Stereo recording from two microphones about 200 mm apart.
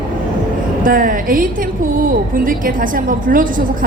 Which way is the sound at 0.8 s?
45° right (ahead or behind).